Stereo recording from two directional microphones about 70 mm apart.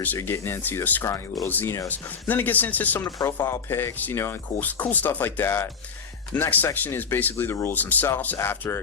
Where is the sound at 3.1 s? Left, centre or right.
Left.